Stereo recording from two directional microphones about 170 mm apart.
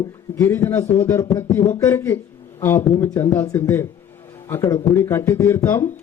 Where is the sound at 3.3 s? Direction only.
15° left (ahead or behind).